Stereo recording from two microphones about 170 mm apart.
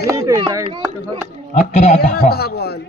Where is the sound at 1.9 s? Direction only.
70° left (ahead or behind).